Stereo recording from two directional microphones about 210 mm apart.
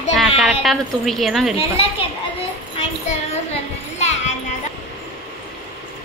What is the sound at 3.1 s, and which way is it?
Speech, 35° left (ahead or behind).